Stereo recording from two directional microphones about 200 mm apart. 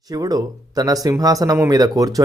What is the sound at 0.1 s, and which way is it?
Speech, 20° right (ahead or behind).